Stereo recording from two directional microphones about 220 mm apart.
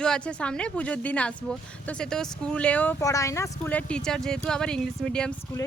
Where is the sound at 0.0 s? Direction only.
5° left (ahead or behind).